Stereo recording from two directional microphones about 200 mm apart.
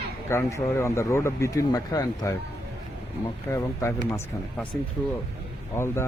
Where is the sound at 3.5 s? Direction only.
15° left (ahead or behind).